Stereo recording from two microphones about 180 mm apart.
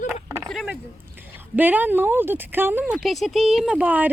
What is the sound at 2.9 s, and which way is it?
Speech, centre (ahead or behind).